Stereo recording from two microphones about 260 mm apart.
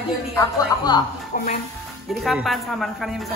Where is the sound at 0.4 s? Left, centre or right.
Centre.